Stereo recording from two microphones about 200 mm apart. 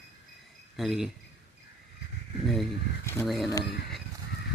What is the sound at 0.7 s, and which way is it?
Speech, centre (ahead or behind).